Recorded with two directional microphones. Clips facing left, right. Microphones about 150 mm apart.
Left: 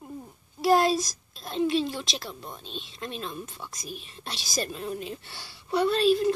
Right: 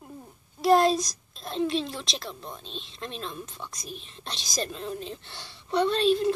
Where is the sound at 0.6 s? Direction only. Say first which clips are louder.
Right 1 dB; 5° left (ahead or behind).